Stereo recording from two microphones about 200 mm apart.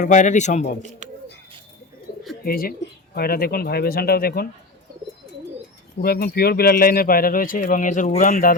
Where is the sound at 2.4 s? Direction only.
45° left (ahead or behind).